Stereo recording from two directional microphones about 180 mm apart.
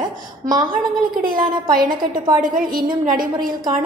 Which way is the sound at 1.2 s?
50° right (ahead or behind).